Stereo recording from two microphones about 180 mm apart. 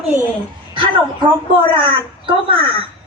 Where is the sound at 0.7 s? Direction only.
25° right (ahead or behind).